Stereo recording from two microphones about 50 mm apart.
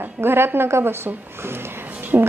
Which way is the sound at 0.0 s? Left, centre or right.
Right.